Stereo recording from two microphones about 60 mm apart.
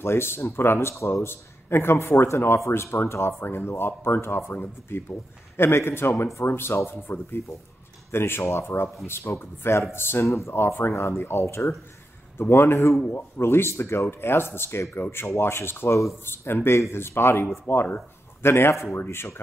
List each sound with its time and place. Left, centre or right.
0.0 s speech: left
10.2 s speech: left
10.5 s speech: left